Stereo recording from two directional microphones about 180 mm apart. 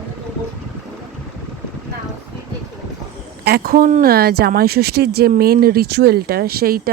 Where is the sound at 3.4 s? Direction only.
60° right (ahead or behind).